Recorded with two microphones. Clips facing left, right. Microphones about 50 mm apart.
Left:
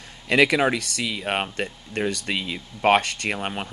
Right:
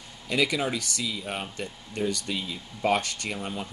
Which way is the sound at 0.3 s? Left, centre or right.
Left.